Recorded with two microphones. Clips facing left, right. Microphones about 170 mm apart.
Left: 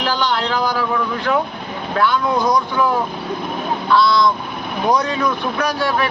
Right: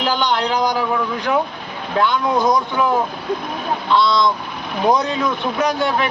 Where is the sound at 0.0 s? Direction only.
20° right (ahead or behind).